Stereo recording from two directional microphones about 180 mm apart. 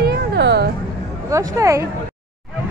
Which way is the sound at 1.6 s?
15° right (ahead or behind).